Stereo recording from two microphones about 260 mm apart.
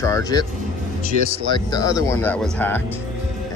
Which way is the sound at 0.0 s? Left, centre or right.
Centre.